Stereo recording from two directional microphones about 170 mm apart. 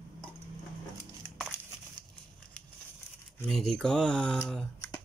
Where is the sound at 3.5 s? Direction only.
5° left (ahead or behind).